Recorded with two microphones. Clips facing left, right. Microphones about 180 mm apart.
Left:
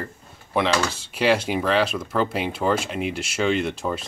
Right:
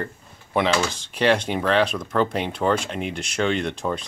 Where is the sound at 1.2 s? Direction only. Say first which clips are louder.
Even; 5° left (ahead or behind).